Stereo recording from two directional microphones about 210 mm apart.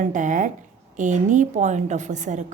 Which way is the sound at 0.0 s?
35° right (ahead or behind).